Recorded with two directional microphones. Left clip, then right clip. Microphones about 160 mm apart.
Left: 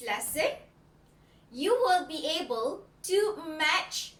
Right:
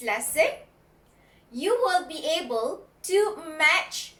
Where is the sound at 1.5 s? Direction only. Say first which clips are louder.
Right 2 dB; 20° left (ahead or behind).